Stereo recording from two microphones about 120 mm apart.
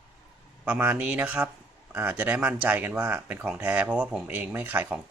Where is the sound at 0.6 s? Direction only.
10° right (ahead or behind).